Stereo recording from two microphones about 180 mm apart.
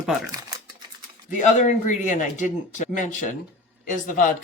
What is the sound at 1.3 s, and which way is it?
A man's voice, 45° left (ahead or behind).